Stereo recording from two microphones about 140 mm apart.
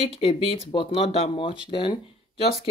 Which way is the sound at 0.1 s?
45° left (ahead or behind).